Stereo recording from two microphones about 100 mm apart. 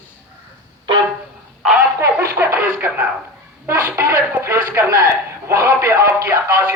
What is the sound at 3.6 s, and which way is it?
Speech, 30° right (ahead or behind).